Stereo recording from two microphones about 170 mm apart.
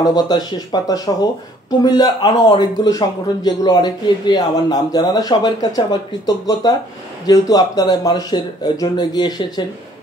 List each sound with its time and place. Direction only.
0.0 s a man's voice: 25° left (ahead or behind)